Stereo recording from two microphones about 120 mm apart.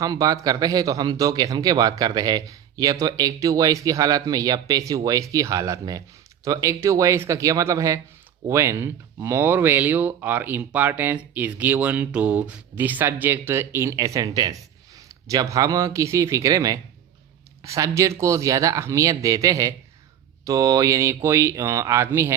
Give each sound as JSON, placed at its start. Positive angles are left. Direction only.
{"t": 0.0, "sound": "speech", "side_deg": -30}